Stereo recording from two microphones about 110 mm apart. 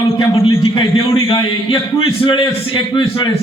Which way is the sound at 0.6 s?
50° left (ahead or behind).